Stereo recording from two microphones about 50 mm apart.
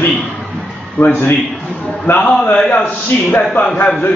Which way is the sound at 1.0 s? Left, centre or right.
Left.